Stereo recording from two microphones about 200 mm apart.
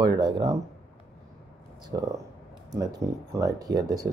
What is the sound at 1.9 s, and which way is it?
Speech, 20° right (ahead or behind).